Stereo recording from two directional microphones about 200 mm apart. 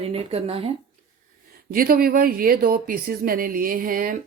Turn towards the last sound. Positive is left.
turn(degrees=-45)  # may be behind; listen again after turning